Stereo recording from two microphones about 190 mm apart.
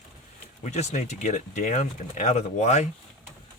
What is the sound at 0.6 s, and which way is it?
Speech, 35° left (ahead or behind).